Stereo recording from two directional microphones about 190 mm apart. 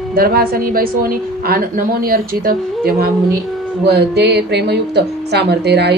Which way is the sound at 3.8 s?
60° right (ahead or behind).